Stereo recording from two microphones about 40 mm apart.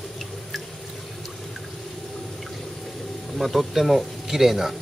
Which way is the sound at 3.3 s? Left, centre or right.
Centre.